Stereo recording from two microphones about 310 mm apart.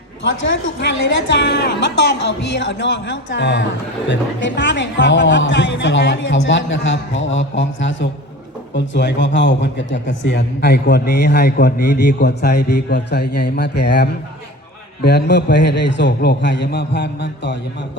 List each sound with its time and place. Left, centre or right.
0.2 s a man's voice: left